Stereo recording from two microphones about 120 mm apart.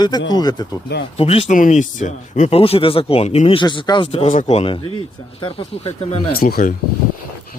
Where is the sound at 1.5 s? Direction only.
90° left.